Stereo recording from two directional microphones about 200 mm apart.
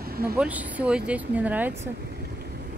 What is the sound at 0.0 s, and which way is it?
Vehicle, 50° right (ahead or behind).